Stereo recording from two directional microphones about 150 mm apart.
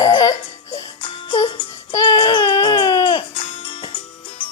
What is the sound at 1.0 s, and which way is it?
Music, 35° left (ahead or behind).